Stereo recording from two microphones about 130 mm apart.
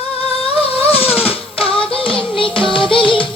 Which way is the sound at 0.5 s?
45° left (ahead or behind).